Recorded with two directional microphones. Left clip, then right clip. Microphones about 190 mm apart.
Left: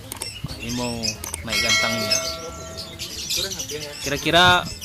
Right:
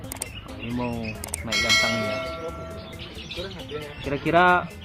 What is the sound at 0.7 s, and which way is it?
Speech, 20° left (ahead or behind).